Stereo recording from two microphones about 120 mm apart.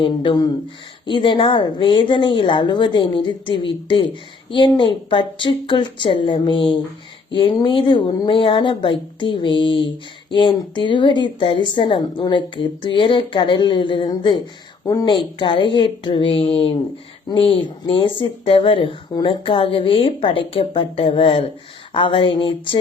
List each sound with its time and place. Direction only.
0.0 s speech: 40° left (ahead or behind)